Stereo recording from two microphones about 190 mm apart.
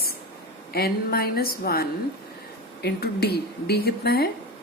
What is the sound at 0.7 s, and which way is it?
A woman's voice, 55° left (ahead or behind).